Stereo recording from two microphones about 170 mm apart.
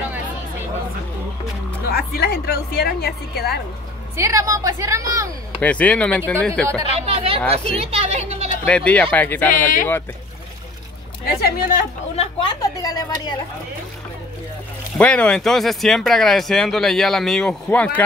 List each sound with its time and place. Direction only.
1.9 s a woman's voice: 70° left (ahead or behind)
4.2 s a woman's voice: 20° right (ahead or behind)
5.6 s speech: 10° left (ahead or behind)
6.9 s speech: 35° right (ahead or behind)
7.9 s a sound: 40° right (ahead or behind)
8.6 s speech: 10° left (ahead or behind)
9.5 s speech: 50° left (ahead or behind)
11.2 s a woman's voice: 65° left (ahead or behind)
12.2 s a woman's voice: 30° left (ahead or behind)
15.0 s speech: 5° left (ahead or behind)